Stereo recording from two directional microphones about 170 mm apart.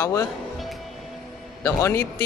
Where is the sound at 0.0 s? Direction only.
15° left (ahead or behind).